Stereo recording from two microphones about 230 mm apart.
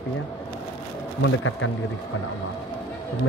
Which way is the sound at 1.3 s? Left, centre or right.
Left.